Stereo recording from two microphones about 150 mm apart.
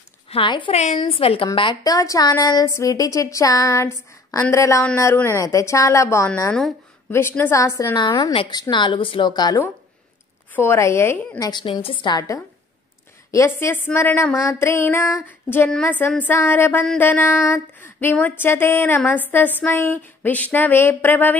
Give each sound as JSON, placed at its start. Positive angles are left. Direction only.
{"t": 0.3, "sound": "a woman's voice", "side_deg": 35}
{"t": 1.8, "sound": "speech", "side_deg": 25}
{"t": 11.6, "sound": "a woman's voice", "side_deg": 35}
{"t": 13.3, "sound": "a sound", "side_deg": 20}
{"t": 15.2, "sound": "female singing", "side_deg": 15}
{"t": 15.7, "sound": "a sound", "side_deg": 10}